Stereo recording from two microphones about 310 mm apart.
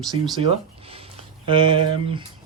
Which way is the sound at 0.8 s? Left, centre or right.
Centre.